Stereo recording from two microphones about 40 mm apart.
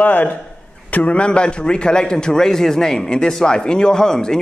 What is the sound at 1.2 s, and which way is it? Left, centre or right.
A man's voice, left.